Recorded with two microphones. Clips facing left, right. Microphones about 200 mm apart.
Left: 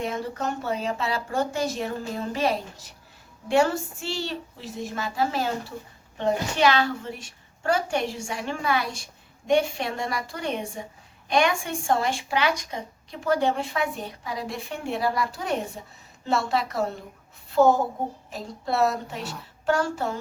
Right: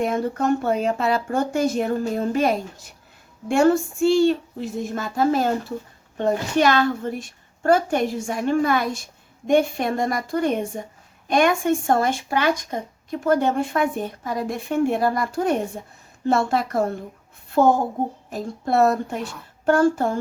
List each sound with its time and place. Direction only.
0.0 s a woman's voice: 50° right (ahead or behind)